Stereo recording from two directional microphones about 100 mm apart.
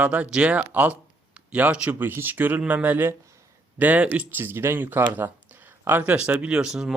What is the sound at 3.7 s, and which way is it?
Speech, 15° right (ahead or behind).